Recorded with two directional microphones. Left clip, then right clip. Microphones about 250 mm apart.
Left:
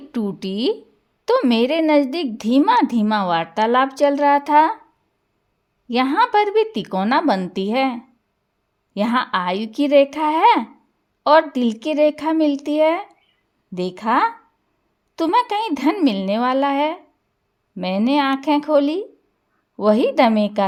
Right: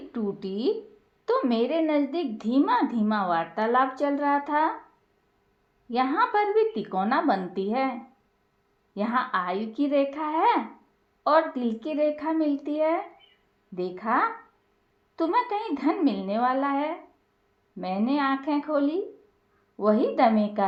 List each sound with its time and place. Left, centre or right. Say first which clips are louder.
0.1 s a woman's voice: left 6 dB; left
5.9 s speech: left 7 dB; left
9.0 s a woman's voice: left 6 dB; left